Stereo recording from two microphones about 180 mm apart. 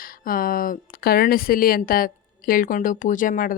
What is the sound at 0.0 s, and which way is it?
Speech, 50° left (ahead or behind).